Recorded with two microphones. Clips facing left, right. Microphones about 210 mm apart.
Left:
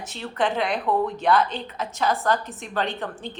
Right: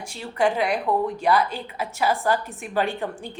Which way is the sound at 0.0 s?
10° right (ahead or behind).